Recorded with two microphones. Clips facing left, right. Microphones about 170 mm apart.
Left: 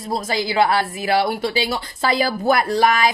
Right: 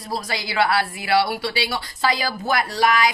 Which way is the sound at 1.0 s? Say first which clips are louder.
Left 1 dB; 45° left (ahead or behind).